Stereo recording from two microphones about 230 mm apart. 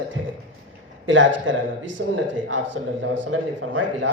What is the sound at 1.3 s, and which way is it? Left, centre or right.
Speech, right.